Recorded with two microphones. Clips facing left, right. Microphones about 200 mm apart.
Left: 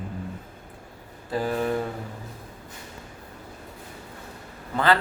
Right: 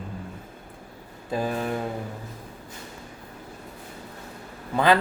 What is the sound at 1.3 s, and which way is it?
Speech, 15° right (ahead or behind).